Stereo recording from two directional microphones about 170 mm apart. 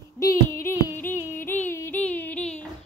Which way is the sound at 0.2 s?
15° left (ahead or behind).